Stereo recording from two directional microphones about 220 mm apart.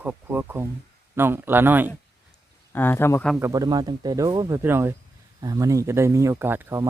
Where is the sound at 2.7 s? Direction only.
10° left (ahead or behind).